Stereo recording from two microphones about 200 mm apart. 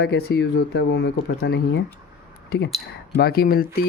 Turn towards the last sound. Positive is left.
turn(degrees=50)  # may be behind; listen again after turning